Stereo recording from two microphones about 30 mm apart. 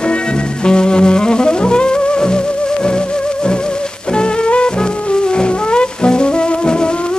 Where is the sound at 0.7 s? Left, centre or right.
Left.